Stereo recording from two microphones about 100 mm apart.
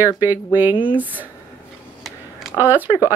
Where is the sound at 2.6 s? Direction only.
20° right (ahead or behind).